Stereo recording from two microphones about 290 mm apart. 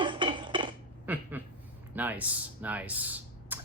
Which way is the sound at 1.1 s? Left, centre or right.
Centre.